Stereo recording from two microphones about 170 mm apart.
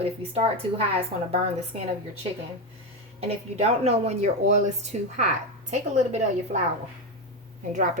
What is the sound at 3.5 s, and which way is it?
Speech, 40° right (ahead or behind).